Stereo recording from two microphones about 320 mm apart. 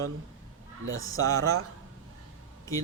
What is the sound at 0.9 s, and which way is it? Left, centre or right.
Speech, right.